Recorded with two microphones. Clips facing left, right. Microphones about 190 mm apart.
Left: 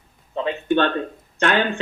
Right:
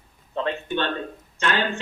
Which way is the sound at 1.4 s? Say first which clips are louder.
Left 5 dB; 60° left (ahead or behind).